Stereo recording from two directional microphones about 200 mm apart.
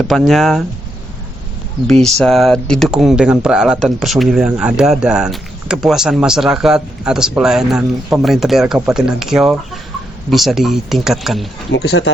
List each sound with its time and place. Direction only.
0.0 s speech: centre (ahead or behind)
1.9 s speech: centre (ahead or behind)
11.7 s speech: 75° left (ahead or behind)